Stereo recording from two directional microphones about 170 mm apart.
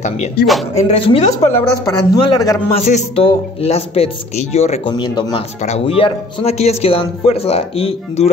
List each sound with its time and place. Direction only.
0.8 s speech: 35° left (ahead or behind)
2.7 s speech: 40° left (ahead or behind)
4.9 s speech: 25° left (ahead or behind)
5.6 s speech: 40° left (ahead or behind)